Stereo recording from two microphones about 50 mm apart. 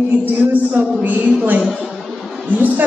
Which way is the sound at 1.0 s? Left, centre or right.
Right.